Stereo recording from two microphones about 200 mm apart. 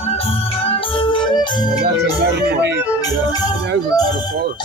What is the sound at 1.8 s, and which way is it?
Speech, 55° right (ahead or behind).